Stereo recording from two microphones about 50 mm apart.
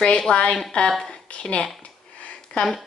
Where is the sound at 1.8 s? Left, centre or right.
Left.